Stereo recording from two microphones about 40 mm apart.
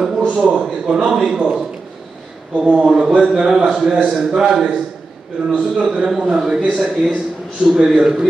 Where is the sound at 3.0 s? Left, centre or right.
Right.